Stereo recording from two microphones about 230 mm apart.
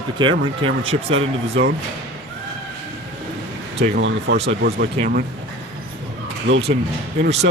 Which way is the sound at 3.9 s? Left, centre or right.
Right.